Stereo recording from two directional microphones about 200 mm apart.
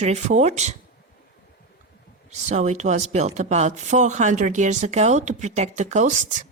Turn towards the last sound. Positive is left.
turn(degrees=-35)  # may be behind; listen again after turning